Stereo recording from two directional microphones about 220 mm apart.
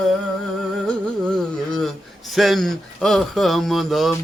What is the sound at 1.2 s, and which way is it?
Speech, 5° left (ahead or behind).